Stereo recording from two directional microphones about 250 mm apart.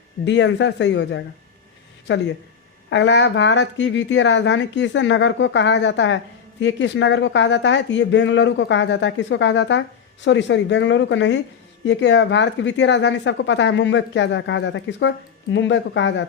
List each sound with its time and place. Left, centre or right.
0.3 s speech: left